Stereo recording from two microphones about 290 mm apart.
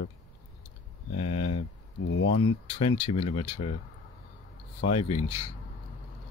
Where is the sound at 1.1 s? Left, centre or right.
Left.